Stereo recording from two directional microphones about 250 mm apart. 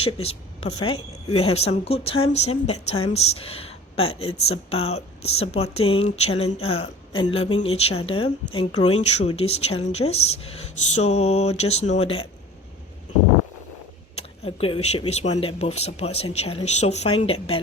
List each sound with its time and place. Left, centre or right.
0.0 s a woman's voice: left
14.2 s speech: left